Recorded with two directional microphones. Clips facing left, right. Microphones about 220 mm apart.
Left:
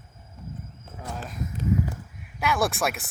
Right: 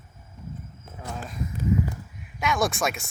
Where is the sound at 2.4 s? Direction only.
Centre (ahead or behind).